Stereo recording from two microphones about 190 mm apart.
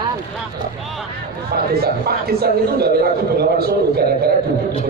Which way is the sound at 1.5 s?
55° right (ahead or behind).